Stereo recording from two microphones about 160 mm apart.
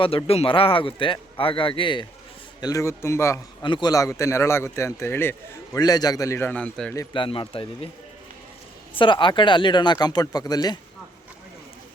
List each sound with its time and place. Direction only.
0.0 s a man's voice: 35° left (ahead or behind); by 3.4 s 15° left (ahead or behind)
3.6 s a man's voice: 30° left (ahead or behind); by 6.9 s 5° left (ahead or behind)
7.1 s a man's voice: 30° left (ahead or behind)
9.0 s speech: 30° left (ahead or behind)